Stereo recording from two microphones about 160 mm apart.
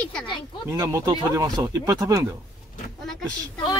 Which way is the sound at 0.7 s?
20° right (ahead or behind).